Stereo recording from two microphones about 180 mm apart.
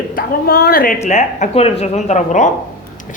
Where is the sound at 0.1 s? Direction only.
55° left (ahead or behind).